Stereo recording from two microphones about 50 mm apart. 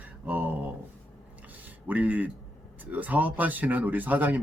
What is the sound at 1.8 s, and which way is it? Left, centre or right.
A man's voice, right.